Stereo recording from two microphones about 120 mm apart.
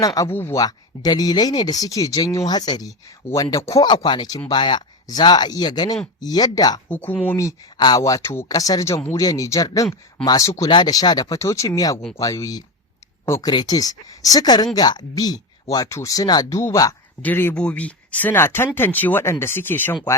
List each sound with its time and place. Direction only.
0.0 s speech: 30° left (ahead or behind)
3.8 s speech: 40° left (ahead or behind)
6.8 s speech: 15° left (ahead or behind)
7.8 s speech: 35° left (ahead or behind)
17.2 s speech: 15° left (ahead or behind)